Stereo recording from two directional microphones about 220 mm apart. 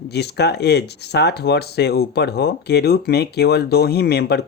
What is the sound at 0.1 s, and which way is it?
Speech, 50° left (ahead or behind).